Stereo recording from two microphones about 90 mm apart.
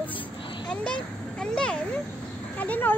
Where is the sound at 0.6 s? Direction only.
10° left (ahead or behind).